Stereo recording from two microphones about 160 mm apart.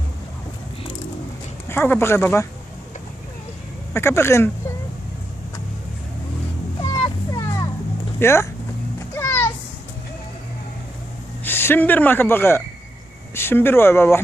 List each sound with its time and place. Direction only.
1.6 s speech: 15° left (ahead or behind)
3.9 s speech: 15° left (ahead or behind)
6.8 s children playing: 25° left (ahead or behind)
8.2 s speech: 15° left (ahead or behind)
9.1 s children playing: 15° left (ahead or behind)
11.4 s speech: 15° left (ahead or behind)